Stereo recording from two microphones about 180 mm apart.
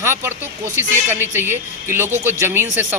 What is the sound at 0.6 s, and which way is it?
Speech, 15° left (ahead or behind).